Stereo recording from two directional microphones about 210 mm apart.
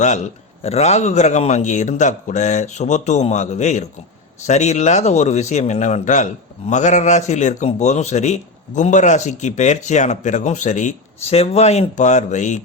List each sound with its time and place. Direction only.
0.6 s a man's voice: 30° left (ahead or behind)